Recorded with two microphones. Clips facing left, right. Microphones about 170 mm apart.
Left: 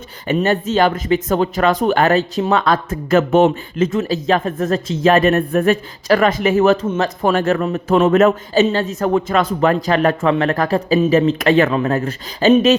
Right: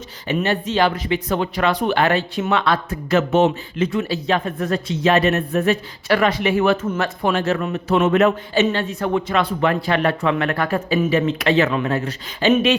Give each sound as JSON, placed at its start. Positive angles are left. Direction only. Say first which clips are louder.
{"t": 0.3, "sound": "speech", "louder": "left 4 dB", "side_deg": 45}
{"t": 6.8, "sound": "a man's voice", "louder": "left 4 dB", "side_deg": 25}
{"t": 7.2, "sound": "speech", "louder": "left 4 dB", "side_deg": 50}
{"t": 7.6, "sound": "speech", "louder": "left 4 dB", "side_deg": 40}